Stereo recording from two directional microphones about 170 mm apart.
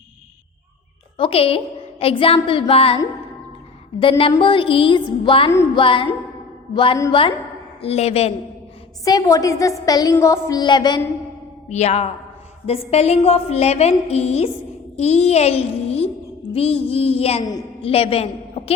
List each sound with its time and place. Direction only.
1.1 s a woman's voice: 35° left (ahead or behind)
4.2 s a woman's voice: 30° left (ahead or behind)
7.1 s a woman's voice: 30° left (ahead or behind)
9.0 s child singing: 20° left (ahead or behind)
11.7 s a woman's voice: 40° left (ahead or behind)